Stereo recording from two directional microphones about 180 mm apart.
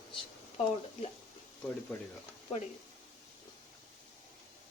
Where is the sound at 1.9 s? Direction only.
5° left (ahead or behind).